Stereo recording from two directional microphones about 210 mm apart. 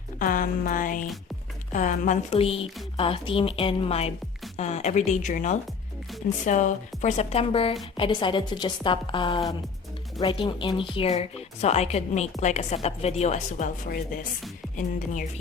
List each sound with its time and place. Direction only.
0.2 s a woman's voice: 40° left (ahead or behind)